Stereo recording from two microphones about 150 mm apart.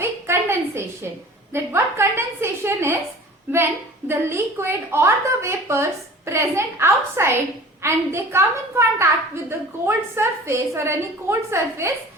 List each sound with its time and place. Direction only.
0.0 s a sound: 15° right (ahead or behind)
1.5 s a woman's voice: 15° right (ahead or behind)
4.1 s a woman's voice: 15° right (ahead or behind)